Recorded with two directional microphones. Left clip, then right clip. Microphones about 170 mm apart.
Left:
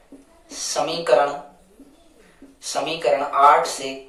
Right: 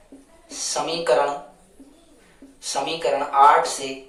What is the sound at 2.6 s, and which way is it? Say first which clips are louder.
Speech: left 1 dB; 15° left (ahead or behind).